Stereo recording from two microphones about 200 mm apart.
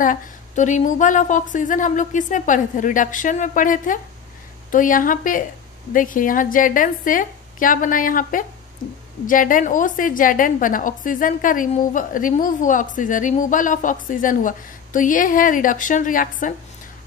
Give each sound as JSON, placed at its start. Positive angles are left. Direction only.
{"t": 0.0, "sound": "a woman's voice", "side_deg": 40}